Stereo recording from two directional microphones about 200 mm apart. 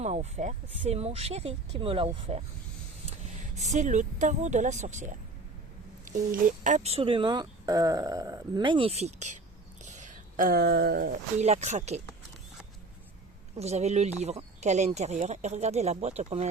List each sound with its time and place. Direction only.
0.0 s speech: 35° right (ahead or behind)
3.6 s speech: 35° right (ahead or behind)
9.8 s a sound: 35° right (ahead or behind)
11.3 s speech: 35° right (ahead or behind)
13.6 s speech: 35° right (ahead or behind)